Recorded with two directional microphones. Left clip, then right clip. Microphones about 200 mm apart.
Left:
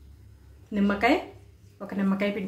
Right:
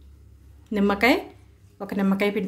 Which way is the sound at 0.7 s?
55° right (ahead or behind).